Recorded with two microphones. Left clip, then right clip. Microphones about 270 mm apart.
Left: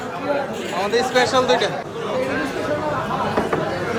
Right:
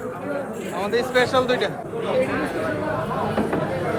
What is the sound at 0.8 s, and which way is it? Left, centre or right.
Speech, centre.